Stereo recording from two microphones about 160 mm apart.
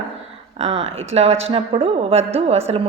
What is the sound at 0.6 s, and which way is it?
A woman's voice, 40° right (ahead or behind).